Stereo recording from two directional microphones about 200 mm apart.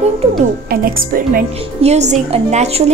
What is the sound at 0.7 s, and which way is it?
Speech, 45° right (ahead or behind).